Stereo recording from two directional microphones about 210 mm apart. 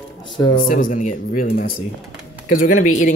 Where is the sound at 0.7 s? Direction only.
40° left (ahead or behind).